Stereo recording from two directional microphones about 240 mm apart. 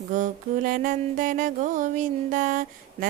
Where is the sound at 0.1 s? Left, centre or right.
Right.